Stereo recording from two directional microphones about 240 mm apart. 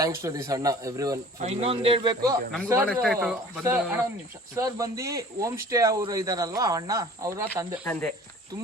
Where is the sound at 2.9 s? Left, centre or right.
Centre.